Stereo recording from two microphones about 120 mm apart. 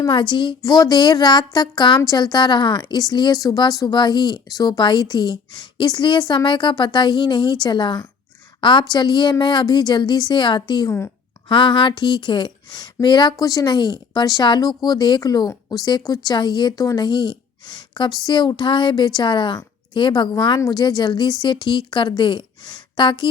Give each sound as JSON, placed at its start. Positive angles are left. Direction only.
{"t": 0.1, "sound": "a woman's voice", "side_deg": 45}
{"t": 10.8, "sound": "speech", "side_deg": 20}
{"t": 11.4, "sound": "a woman's voice", "side_deg": 40}
{"t": 13.3, "sound": "a woman's voice", "side_deg": 30}